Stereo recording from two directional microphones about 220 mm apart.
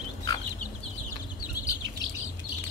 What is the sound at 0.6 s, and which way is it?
Chicken, 35° left (ahead or behind).